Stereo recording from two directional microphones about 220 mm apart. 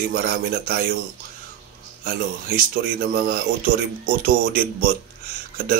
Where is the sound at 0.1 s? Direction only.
40° right (ahead or behind).